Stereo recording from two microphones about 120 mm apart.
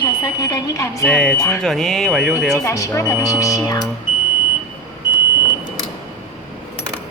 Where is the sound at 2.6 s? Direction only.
25° left (ahead or behind).